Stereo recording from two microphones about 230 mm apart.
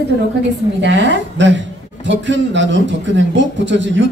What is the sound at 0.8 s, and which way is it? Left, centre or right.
A man's voice, right.